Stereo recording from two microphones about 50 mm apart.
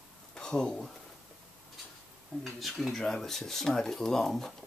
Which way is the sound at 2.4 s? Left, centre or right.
Centre.